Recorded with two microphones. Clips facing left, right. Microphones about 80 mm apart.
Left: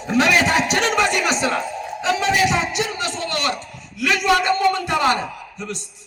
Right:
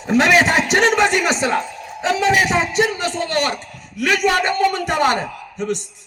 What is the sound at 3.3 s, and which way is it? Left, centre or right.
A man's voice, right.